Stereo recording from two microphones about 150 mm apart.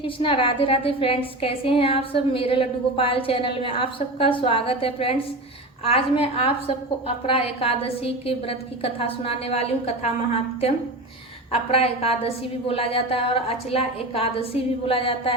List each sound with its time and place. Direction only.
0.0 s a woman's voice: 35° left (ahead or behind)
11.7 s a woman's voice: 40° left (ahead or behind)